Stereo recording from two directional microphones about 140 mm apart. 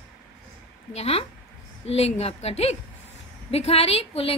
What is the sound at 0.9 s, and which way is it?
A woman's voice, 45° left (ahead or behind).